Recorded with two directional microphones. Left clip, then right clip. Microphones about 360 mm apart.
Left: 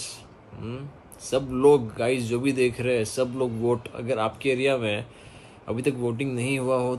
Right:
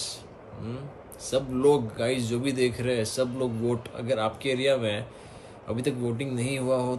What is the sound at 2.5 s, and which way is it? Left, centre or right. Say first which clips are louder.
Speech: left 3 dB; left.